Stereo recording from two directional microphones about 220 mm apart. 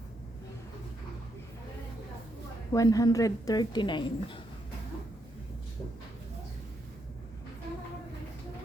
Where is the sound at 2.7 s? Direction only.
15° left (ahead or behind).